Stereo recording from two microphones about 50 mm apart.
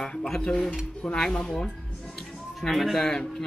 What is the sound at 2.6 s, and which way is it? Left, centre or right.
Speech, centre.